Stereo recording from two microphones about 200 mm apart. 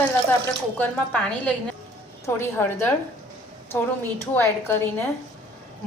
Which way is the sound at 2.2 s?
10° left (ahead or behind).